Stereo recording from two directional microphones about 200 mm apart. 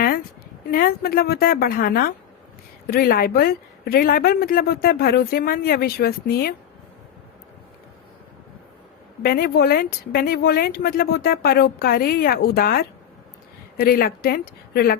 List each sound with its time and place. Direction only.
0.7 s a woman's voice: 45° left (ahead or behind)
9.2 s a woman's voice: 50° left (ahead or behind)